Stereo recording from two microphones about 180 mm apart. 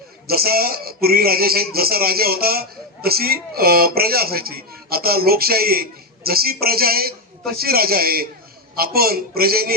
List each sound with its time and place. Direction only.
0.3 s speech: 60° right (ahead or behind)